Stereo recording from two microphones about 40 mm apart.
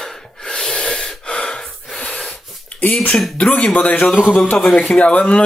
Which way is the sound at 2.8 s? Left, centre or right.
Left.